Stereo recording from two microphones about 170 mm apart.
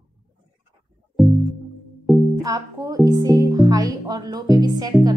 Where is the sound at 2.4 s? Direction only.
20° right (ahead or behind).